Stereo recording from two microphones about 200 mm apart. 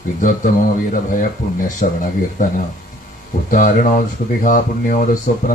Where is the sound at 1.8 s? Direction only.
40° left (ahead or behind).